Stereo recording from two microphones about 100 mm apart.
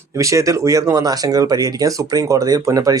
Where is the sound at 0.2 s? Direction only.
30° right (ahead or behind).